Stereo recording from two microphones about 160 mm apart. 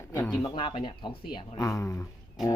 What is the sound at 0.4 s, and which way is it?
Speech, 30° left (ahead or behind).